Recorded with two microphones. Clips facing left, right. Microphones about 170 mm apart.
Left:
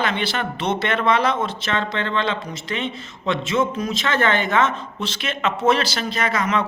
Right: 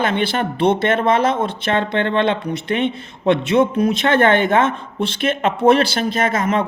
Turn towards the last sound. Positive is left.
turn(degrees=-50)  # may be behind; listen again after turning